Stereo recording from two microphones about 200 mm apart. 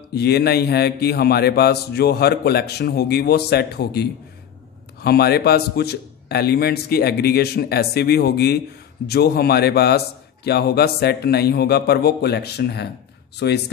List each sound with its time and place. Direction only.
0.1 s speech: 55° left (ahead or behind)